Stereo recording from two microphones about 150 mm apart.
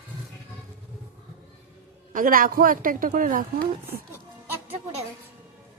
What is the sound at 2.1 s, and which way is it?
A woman's voice, 65° right (ahead or behind).